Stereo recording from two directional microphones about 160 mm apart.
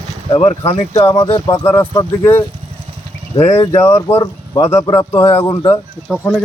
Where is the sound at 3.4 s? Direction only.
45° left (ahead or behind).